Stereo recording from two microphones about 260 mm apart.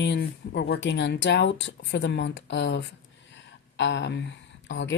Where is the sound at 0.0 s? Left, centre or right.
Left.